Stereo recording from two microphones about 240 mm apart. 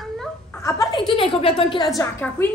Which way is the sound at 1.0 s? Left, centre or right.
Left.